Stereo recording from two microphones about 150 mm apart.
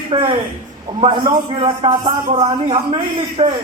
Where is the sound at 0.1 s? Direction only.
35° right (ahead or behind).